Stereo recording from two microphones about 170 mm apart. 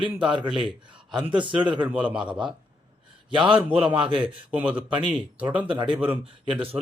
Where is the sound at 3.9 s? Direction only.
5° right (ahead or behind).